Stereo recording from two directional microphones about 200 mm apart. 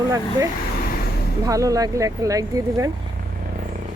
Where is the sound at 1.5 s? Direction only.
15° right (ahead or behind).